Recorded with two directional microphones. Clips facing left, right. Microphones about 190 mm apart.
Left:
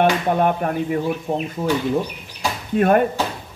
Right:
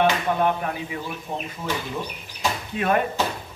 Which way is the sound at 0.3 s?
50° left (ahead or behind).